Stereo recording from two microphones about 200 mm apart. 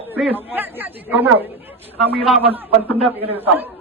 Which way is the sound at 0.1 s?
10° right (ahead or behind).